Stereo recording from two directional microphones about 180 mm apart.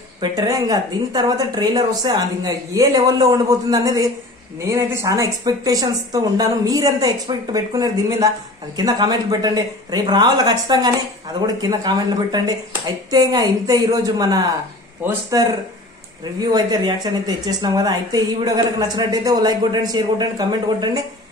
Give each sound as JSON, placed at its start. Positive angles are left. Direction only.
{"t": 0.2, "sound": "a woman's voice", "side_deg": -20}